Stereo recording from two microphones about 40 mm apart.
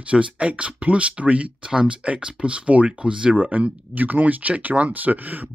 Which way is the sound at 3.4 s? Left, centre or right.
Right.